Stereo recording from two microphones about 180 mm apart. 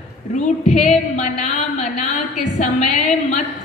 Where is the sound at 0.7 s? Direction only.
40° left (ahead or behind).